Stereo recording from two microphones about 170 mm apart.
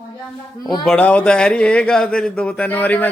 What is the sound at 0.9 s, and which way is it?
A man's voice, 10° left (ahead or behind).